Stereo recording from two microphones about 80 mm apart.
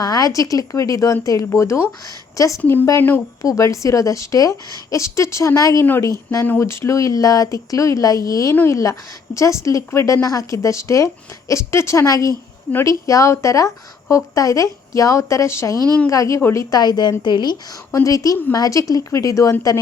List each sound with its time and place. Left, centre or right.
0.0 s a woman's voice: left
2.6 s a woman's voice: left
3.5 s a woman's voice: left
5.8 s a woman's voice: left
10.2 s a woman's voice: left
15.7 s a woman's voice: right
16.0 s speech: left
16.7 s a woman's voice: left
17.9 s a woman's voice: left